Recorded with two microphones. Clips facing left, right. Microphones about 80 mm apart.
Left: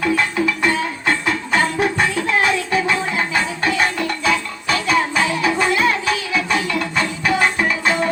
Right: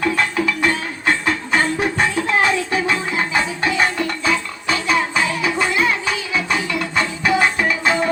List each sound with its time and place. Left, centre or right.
0.3 s music: left
1.0 s music: right
5.3 s music: centre
5.5 s music: right
7.3 s music: right